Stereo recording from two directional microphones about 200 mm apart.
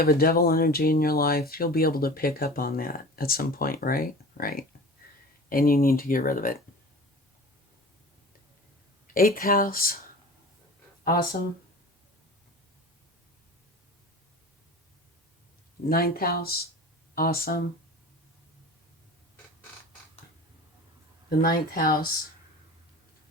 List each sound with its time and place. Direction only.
0.0 s speech: 50° left (ahead or behind)
9.1 s speech: 45° left (ahead or behind)
11.0 s speech: 45° left (ahead or behind)
15.9 s speech: 50° left (ahead or behind)
21.2 s speech: 50° left (ahead or behind)